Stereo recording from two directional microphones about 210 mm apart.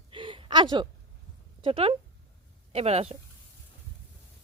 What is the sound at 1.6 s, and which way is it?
Speech, 25° right (ahead or behind).